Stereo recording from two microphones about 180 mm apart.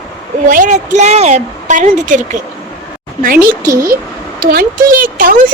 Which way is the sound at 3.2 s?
55° right (ahead or behind).